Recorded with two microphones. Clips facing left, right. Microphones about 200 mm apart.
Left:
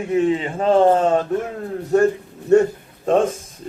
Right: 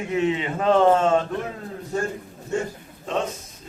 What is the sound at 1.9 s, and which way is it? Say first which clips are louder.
Speech: left 11 dB; 65° left (ahead or behind).